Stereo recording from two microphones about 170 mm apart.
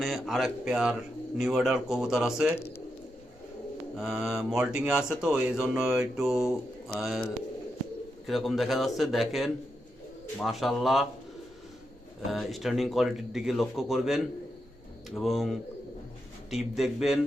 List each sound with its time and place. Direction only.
0.0 s speech: centre (ahead or behind)
3.9 s speech: 5° right (ahead or behind)
8.3 s speech: centre (ahead or behind)
12.3 s speech: centre (ahead or behind)